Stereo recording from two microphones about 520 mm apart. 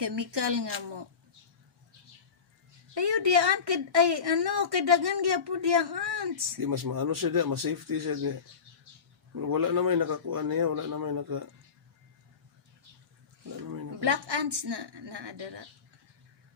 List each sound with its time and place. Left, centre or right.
0.0 s a woman's voice: right
2.9 s a woman's voice: right
9.3 s a man's voice: right
13.6 s a woman's voice: right